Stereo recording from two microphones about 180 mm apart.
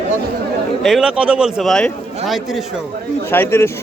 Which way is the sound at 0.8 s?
Centre (ahead or behind).